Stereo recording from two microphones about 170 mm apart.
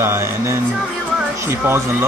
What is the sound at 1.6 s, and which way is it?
Speech, 15° right (ahead or behind).